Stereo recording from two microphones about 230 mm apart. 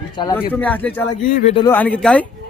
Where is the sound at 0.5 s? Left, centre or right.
Centre.